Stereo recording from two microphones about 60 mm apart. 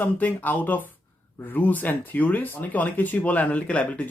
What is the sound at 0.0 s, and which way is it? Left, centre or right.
Speech, left.